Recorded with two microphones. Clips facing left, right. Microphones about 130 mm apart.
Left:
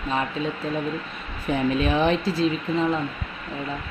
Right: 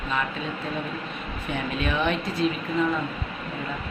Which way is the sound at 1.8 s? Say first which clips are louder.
Left 4 dB; 35° left (ahead or behind).